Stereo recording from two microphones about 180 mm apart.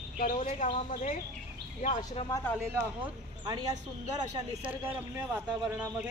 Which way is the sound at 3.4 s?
25° right (ahead or behind).